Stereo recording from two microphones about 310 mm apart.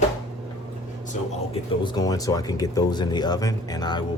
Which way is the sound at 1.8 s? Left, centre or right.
Centre.